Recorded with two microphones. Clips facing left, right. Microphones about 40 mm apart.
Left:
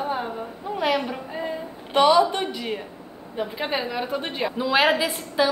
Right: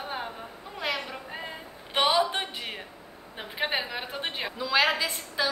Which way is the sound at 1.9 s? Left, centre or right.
Centre.